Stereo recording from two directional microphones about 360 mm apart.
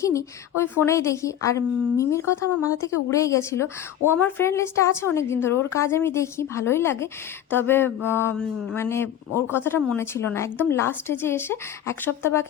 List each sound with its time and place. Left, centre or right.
0.0 s speech: centre